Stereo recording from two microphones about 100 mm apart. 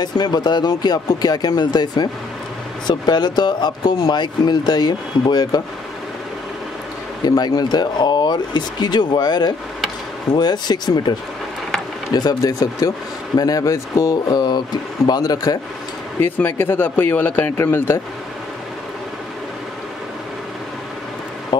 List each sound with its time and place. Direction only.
0.0 s speech: 45° left (ahead or behind)
7.2 s speech: 45° left (ahead or behind)
16.2 s speech: 20° left (ahead or behind)